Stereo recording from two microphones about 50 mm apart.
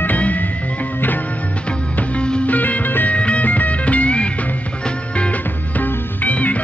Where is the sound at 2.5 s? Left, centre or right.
Left.